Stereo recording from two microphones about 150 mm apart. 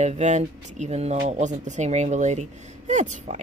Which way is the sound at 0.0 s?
50° right (ahead or behind).